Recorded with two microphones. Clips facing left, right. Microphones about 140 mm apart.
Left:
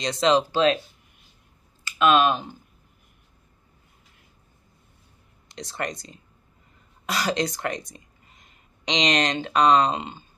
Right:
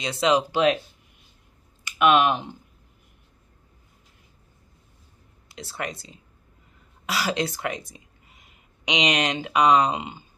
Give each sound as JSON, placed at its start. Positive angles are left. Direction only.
{"t": 0.0, "sound": "speech", "side_deg": -10}
{"t": 1.9, "sound": "speech", "side_deg": -15}
{"t": 5.5, "sound": "speech", "side_deg": -5}